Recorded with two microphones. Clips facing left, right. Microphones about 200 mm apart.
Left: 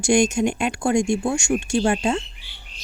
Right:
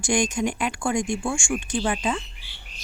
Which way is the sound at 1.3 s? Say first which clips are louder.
Left 5 dB; 45° left (ahead or behind).